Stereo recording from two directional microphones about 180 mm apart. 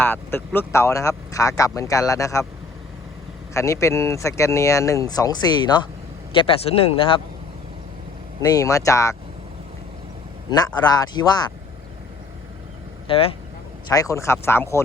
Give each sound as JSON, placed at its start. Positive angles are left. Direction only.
{"t": 0.0, "sound": "speech", "side_deg": 10}
{"t": 3.5, "sound": "speech", "side_deg": 15}
{"t": 8.4, "sound": "speech", "side_deg": 20}
{"t": 10.9, "sound": "speech", "side_deg": 25}
{"t": 13.1, "sound": "speech", "side_deg": 30}
{"t": 13.9, "sound": "speech", "side_deg": 20}